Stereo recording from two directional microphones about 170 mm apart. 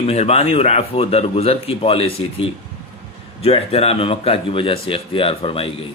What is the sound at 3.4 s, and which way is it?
Speech, 35° left (ahead or behind).